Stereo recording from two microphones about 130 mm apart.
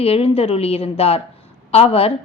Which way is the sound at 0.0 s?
50° left (ahead or behind).